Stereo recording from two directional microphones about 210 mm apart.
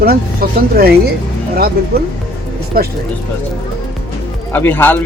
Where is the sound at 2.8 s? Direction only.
45° right (ahead or behind).